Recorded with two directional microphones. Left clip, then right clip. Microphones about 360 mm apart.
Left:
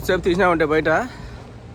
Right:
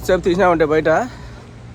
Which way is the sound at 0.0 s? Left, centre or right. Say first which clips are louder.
Right 3 dB; centre.